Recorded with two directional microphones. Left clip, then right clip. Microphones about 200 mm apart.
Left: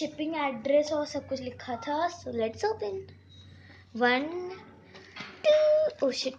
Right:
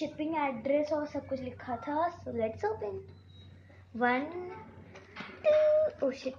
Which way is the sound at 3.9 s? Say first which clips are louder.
Left 4 dB; 40° left (ahead or behind).